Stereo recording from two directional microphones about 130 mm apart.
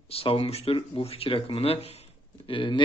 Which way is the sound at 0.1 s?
50° left (ahead or behind).